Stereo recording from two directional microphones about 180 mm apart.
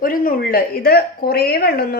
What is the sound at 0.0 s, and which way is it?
Speech, 50° left (ahead or behind).